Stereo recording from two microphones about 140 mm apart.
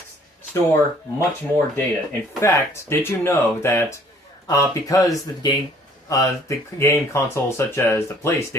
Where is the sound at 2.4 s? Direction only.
20° left (ahead or behind).